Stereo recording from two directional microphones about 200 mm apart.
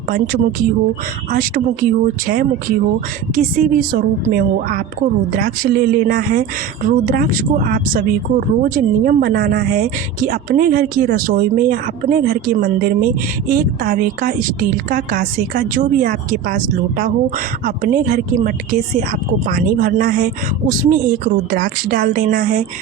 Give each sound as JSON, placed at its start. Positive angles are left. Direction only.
{"t": 1.3, "sound": "speech", "side_deg": -45}